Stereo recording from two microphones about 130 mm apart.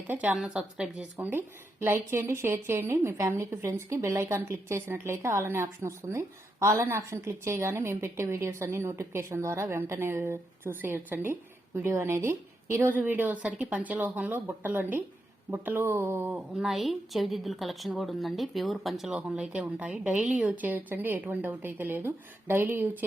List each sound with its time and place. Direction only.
0.1 s a woman's voice: 10° right (ahead or behind)
16.6 s a woman's voice: centre (ahead or behind)